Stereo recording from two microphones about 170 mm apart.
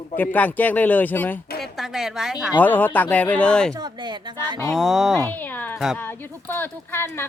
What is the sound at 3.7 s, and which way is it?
Speech, 25° right (ahead or behind).